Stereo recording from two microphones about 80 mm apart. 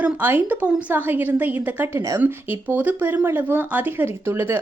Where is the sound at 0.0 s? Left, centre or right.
Right.